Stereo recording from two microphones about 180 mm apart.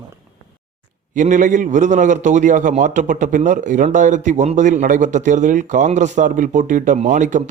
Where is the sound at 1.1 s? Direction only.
45° right (ahead or behind).